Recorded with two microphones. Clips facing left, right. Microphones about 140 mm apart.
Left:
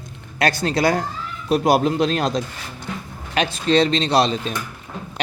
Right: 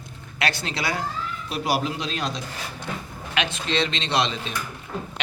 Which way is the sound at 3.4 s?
40° left (ahead or behind).